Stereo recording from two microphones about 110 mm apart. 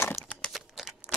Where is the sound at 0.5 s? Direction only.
5° right (ahead or behind).